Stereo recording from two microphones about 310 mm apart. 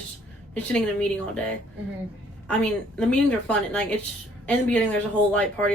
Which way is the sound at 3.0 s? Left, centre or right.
Centre.